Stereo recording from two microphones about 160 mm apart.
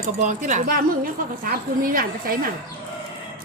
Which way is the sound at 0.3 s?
50° right (ahead or behind).